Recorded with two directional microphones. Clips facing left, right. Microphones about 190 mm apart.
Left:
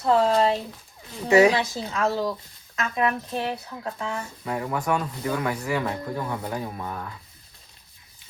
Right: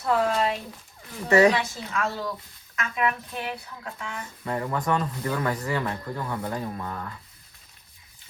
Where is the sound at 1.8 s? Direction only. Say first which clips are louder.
Left 4 dB; 30° left (ahead or behind).